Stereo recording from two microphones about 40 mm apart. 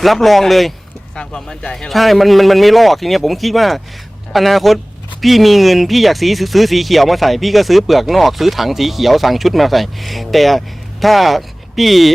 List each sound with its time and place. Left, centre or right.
0.0 s speech: centre
1.1 s speech: left
1.9 s speech: centre